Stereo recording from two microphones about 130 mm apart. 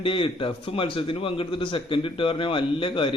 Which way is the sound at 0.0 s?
45° left (ahead or behind).